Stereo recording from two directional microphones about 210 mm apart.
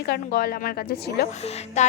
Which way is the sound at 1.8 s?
35° left (ahead or behind).